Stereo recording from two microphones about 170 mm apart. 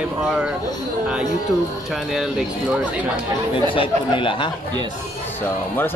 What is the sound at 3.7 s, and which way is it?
Speech, 30° left (ahead or behind).